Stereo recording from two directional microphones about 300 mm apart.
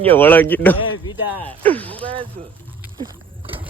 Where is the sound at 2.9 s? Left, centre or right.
Centre.